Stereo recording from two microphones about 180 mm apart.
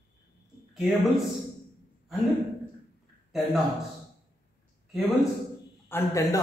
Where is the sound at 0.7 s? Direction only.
Centre (ahead or behind).